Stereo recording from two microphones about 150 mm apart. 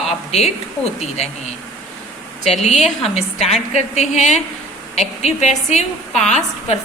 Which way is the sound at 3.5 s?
45° left (ahead or behind).